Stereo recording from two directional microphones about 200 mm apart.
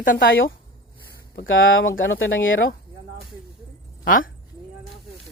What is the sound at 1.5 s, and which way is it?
Speech, 75° left (ahead or behind).